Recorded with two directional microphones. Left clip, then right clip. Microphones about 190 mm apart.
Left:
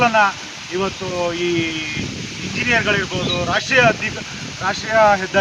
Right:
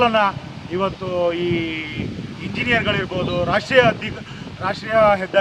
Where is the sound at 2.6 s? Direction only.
20° right (ahead or behind).